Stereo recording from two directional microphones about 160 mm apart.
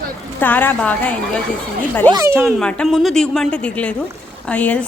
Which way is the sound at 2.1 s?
20° right (ahead or behind).